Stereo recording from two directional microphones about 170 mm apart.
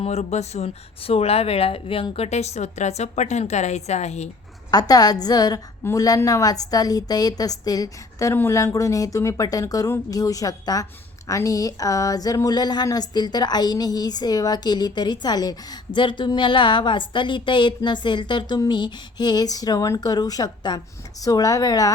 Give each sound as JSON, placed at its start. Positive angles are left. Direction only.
{"t": 0.0, "sound": "speech", "side_deg": 40}
{"t": 4.7, "sound": "a woman's voice", "side_deg": 20}